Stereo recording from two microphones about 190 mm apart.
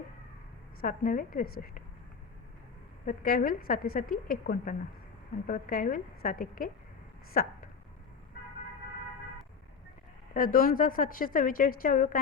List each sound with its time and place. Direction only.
0.8 s a woman's voice: 45° left (ahead or behind)
3.1 s a woman's voice: 45° left (ahead or behind)
10.3 s a woman's voice: 45° left (ahead or behind)